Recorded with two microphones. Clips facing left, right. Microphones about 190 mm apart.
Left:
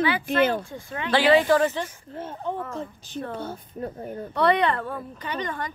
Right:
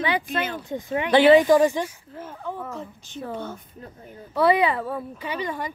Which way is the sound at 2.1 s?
25° left (ahead or behind).